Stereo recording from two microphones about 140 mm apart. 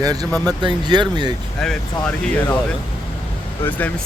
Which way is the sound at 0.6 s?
35° right (ahead or behind).